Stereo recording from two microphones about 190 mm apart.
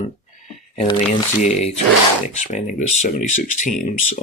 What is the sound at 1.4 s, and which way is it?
Speech, 35° left (ahead or behind).